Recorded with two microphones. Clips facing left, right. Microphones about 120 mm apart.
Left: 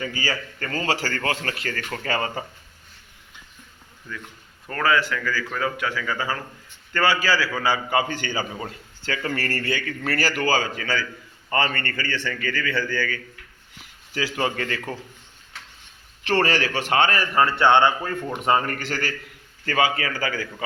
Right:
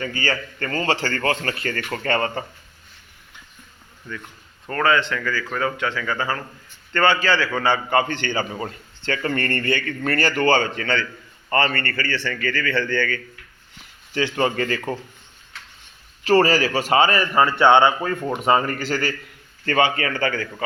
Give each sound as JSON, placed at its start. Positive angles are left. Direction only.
{"t": 0.0, "sound": "a man's voice", "side_deg": 10}
{"t": 4.1, "sound": "a man's voice", "side_deg": 5}
{"t": 16.2, "sound": "a man's voice", "side_deg": -10}
{"t": 17.3, "sound": "speech", "side_deg": -20}
{"t": 18.6, "sound": "a man's voice", "side_deg": 0}